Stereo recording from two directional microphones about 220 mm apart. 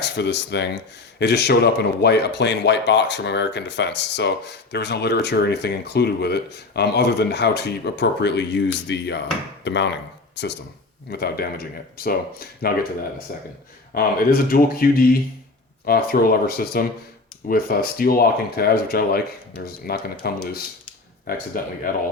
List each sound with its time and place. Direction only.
0.0 s speech: 50° left (ahead or behind)